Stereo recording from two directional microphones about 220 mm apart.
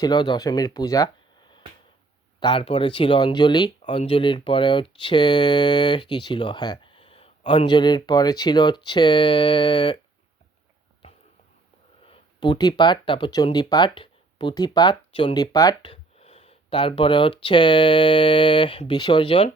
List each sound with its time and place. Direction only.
0.0 s speech: 20° left (ahead or behind)
12.0 s speech: 25° left (ahead or behind)